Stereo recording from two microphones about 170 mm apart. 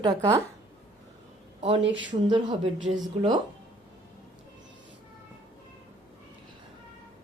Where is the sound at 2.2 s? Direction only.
30° right (ahead or behind).